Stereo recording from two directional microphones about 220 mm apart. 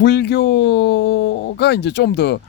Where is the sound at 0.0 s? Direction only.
50° left (ahead or behind).